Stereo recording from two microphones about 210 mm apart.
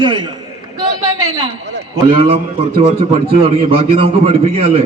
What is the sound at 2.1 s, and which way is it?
A man's voice, 25° right (ahead or behind).